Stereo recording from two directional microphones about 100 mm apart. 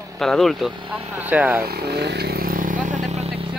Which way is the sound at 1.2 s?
15° right (ahead or behind).